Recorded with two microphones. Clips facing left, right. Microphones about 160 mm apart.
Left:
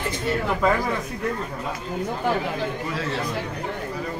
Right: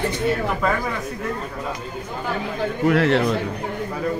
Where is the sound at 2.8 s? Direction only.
75° right (ahead or behind).